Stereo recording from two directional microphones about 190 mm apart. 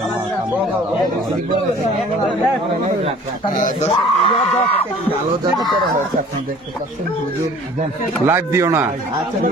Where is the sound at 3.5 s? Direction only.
40° left (ahead or behind).